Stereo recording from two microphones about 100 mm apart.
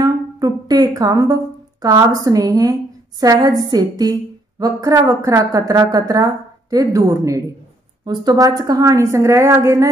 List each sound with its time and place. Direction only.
0.0 s a woman's voice: 40° right (ahead or behind)
8.0 s a woman's voice: 45° right (ahead or behind)